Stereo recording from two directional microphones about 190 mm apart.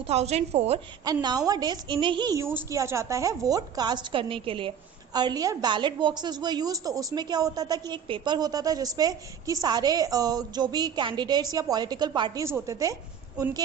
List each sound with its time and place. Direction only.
0.0 s a woman's voice: 35° right (ahead or behind)
1.0 s a woman's voice: 20° right (ahead or behind)